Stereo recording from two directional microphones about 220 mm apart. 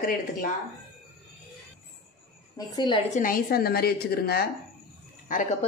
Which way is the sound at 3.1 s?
40° left (ahead or behind).